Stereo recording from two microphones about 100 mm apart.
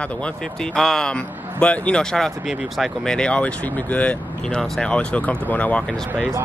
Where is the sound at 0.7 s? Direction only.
5° left (ahead or behind).